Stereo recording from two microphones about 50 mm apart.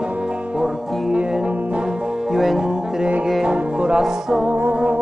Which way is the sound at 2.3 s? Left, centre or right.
Centre.